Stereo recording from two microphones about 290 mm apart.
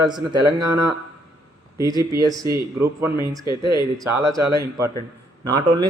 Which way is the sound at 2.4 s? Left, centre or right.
Centre.